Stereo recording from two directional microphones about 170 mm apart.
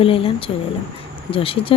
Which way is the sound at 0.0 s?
35° left (ahead or behind).